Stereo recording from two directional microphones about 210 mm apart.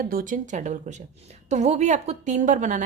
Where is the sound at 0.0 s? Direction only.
45° right (ahead or behind).